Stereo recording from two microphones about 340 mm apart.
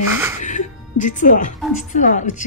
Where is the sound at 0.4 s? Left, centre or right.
Left.